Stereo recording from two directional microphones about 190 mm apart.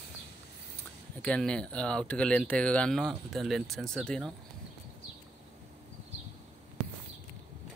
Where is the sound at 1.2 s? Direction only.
5° left (ahead or behind).